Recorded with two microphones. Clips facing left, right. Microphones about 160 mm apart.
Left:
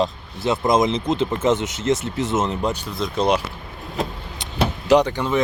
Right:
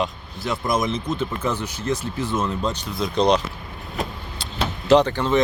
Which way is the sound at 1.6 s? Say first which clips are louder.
Left 4 dB; 80° left.